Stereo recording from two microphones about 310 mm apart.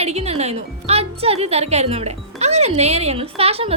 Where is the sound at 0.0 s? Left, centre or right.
Centre.